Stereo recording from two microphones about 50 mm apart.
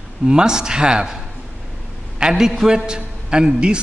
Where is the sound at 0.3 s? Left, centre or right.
Centre.